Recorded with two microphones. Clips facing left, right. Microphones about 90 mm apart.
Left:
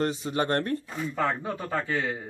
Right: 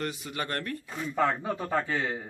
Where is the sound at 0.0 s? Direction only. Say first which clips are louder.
Left 7 dB; 30° left (ahead or behind).